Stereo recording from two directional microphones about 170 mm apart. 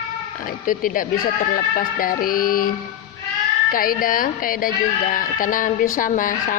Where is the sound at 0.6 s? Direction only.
55° left (ahead or behind).